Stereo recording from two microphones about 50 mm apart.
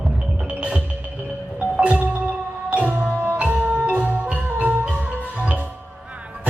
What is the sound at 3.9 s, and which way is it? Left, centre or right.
Marimba, right.